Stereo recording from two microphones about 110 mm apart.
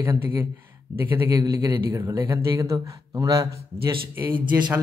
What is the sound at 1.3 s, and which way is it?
A man's voice, 35° right (ahead or behind).